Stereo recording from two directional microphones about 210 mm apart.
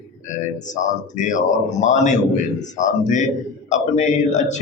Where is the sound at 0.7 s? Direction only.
35° left (ahead or behind).